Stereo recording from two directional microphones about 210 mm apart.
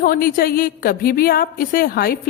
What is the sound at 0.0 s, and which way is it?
A woman's voice, 45° left (ahead or behind).